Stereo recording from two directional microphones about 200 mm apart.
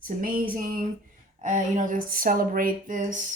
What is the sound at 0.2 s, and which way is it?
Speech, 45° right (ahead or behind).